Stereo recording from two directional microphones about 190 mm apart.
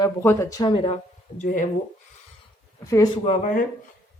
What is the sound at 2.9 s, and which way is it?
Speech, 15° left (ahead or behind).